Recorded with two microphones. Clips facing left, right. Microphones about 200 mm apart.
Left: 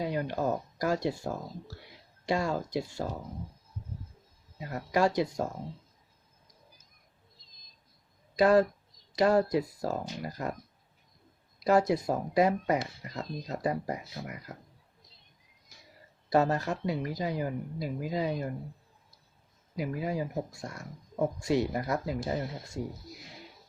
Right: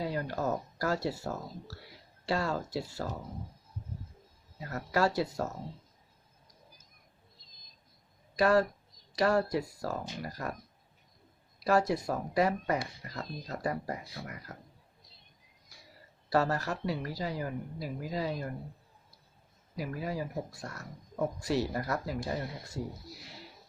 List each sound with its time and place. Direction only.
0.0 s a sound: 20° left (ahead or behind)
1.0 s speech: 15° left (ahead or behind)
4.5 s speech: 15° left (ahead or behind)
8.4 s a woman's voice: 20° left (ahead or behind)
11.6 s a woman's voice: 20° left (ahead or behind)
16.3 s a woman's voice: 20° left (ahead or behind)
19.7 s a woman's voice: 20° left (ahead or behind)
22.4 s speech: centre (ahead or behind)
23.0 s a sound: 20° left (ahead or behind)